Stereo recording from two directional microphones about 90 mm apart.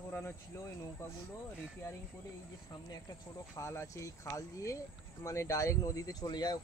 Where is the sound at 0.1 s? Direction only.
30° left (ahead or behind).